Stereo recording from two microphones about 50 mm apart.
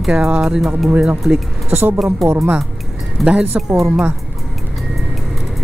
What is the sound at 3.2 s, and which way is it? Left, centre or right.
Speech, right.